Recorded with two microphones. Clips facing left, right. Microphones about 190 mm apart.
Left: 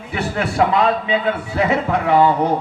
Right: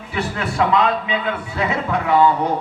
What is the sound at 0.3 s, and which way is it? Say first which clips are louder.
A man's voice: left 2 dB; 30° left (ahead or behind).